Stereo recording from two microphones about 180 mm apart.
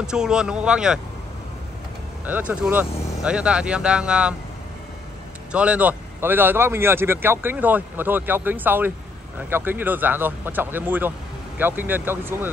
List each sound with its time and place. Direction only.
0.0 s speech: 5° right (ahead or behind)
2.2 s speech: 10° right (ahead or behind)
5.5 s speech: 5° right (ahead or behind)